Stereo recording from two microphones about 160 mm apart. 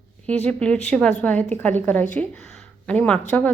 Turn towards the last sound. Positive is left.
turn(degrees=5)  # may be behind; listen again after turning